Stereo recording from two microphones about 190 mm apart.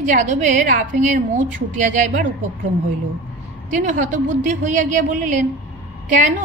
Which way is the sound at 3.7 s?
40° right (ahead or behind).